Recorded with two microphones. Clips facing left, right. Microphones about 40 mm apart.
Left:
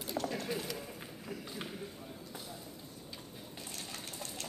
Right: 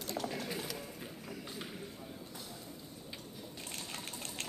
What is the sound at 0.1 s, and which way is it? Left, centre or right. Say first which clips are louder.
Clip-clop: left 2 dB; centre.